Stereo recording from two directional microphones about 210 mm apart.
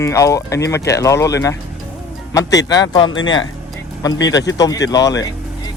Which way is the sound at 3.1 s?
65° left (ahead or behind).